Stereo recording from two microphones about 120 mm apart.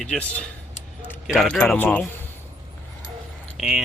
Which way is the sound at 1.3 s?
Centre (ahead or behind).